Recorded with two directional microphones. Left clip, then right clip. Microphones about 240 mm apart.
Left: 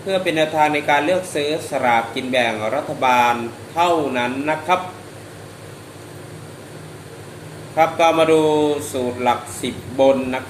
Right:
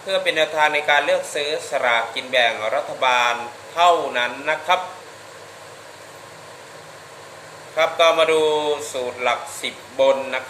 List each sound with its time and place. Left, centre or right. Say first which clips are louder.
0.1 s speech: left 1 dB; centre
7.8 s speech: left 1 dB; centre